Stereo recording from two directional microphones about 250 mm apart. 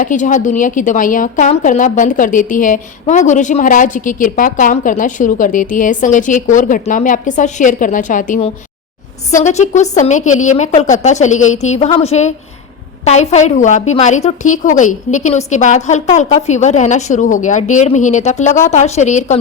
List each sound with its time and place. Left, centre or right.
0.0 s a woman's voice: left